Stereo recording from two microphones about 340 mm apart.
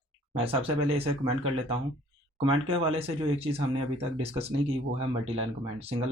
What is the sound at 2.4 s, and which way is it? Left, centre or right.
Speech, centre.